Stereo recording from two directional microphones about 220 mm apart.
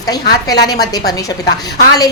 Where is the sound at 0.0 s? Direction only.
15° left (ahead or behind).